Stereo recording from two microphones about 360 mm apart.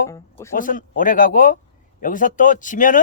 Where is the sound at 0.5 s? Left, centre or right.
Left.